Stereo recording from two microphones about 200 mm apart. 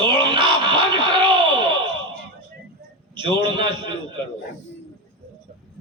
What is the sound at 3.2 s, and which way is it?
Speech, 25° right (ahead or behind).